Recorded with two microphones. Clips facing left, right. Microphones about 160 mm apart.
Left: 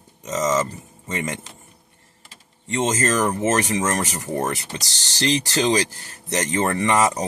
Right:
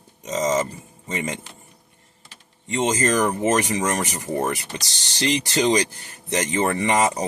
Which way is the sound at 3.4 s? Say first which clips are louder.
Even; 15° right (ahead or behind).